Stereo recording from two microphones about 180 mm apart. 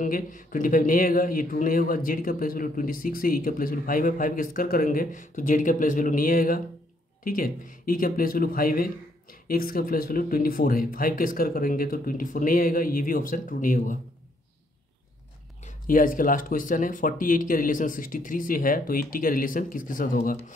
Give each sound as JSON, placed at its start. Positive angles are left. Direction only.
{"t": 0.0, "sound": "a man's voice", "side_deg": 50}
{"t": 15.6, "sound": "a man's voice", "side_deg": 50}